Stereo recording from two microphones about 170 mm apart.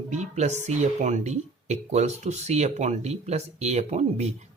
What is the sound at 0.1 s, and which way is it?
Speech, 40° right (ahead or behind).